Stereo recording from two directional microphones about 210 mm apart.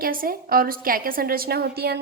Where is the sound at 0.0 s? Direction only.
45° right (ahead or behind).